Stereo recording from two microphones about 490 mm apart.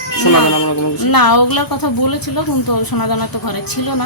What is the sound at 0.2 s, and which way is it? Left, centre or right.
Speech, left.